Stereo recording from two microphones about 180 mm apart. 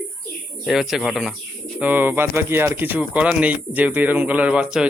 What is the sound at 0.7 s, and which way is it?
Speech, centre (ahead or behind).